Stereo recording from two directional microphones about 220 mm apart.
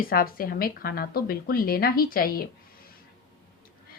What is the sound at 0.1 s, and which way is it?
A woman's voice, 40° left (ahead or behind).